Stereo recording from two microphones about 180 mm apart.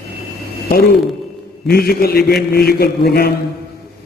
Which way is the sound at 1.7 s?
60° left (ahead or behind).